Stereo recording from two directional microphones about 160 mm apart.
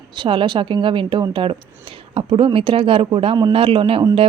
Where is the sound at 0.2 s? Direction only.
30° right (ahead or behind).